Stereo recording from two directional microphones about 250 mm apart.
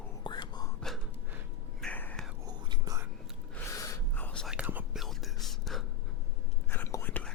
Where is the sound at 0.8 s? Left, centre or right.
Centre.